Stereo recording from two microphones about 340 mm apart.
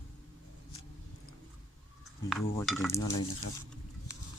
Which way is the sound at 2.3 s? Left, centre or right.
Centre.